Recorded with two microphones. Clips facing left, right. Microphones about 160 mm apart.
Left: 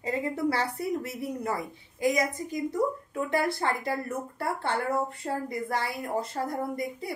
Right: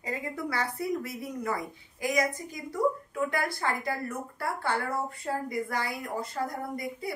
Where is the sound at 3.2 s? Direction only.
25° left (ahead or behind).